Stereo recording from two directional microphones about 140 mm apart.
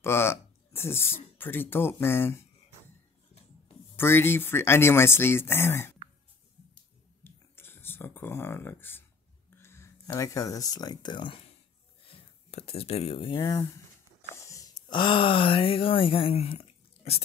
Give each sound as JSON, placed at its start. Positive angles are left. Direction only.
{"t": 0.0, "sound": "speech", "side_deg": 15}
{"t": 3.9, "sound": "speech", "side_deg": 15}
{"t": 7.2, "sound": "a sound", "side_deg": 15}
{"t": 9.6, "sound": "speech", "side_deg": 20}
{"t": 13.4, "sound": "speech", "side_deg": 25}